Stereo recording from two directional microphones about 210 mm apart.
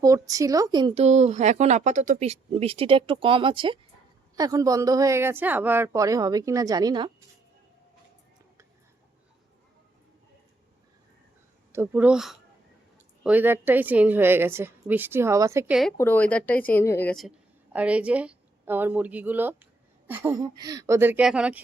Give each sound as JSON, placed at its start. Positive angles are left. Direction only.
{"t": 0.0, "sound": "a woman's voice", "side_deg": -15}
{"t": 11.7, "sound": "a woman's voice", "side_deg": -10}
{"t": 16.0, "sound": "a woman's voice", "side_deg": 10}